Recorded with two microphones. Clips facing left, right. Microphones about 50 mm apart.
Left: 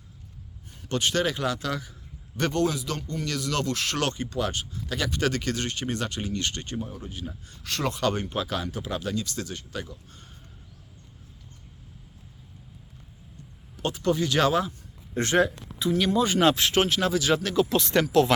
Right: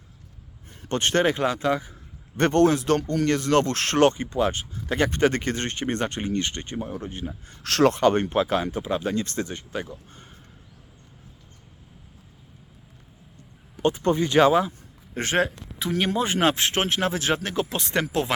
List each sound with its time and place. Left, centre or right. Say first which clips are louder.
0.8 s speech: right 4 dB; right
2.3 s speech: right 7 dB; right
3.2 s speech: right 7 dB; right
6.4 s speech: right 1 dB; right
7.6 s speech: right 10 dB; right
8.3 s speech: right 7 dB; right
9.1 s speech: right 4 dB; right
13.7 s a man's voice: right 4 dB; right